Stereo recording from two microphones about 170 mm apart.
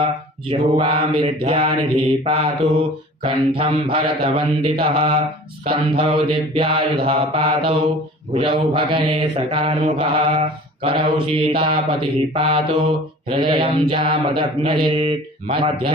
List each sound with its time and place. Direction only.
0.4 s mantra: 30° right (ahead or behind)